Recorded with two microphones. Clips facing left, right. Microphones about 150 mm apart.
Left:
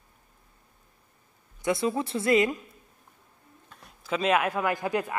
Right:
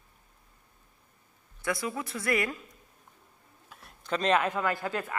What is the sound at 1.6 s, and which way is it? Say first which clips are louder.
Speech: left 6 dB; 25° left (ahead or behind).